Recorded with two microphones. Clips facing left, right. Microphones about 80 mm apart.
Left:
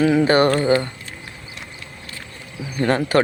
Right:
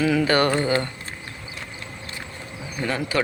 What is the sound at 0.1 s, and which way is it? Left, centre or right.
Speech, left.